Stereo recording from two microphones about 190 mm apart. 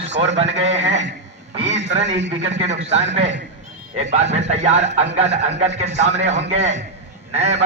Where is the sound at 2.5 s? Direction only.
35° right (ahead or behind).